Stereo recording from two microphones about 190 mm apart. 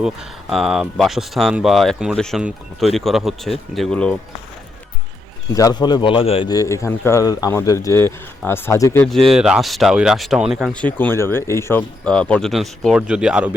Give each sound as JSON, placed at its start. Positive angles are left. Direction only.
{"t": 0.0, "sound": "speech", "side_deg": -5}
{"t": 5.5, "sound": "a man's voice", "side_deg": 20}
{"t": 6.5, "sound": "speech", "side_deg": 15}
{"t": 9.3, "sound": "speech", "side_deg": -5}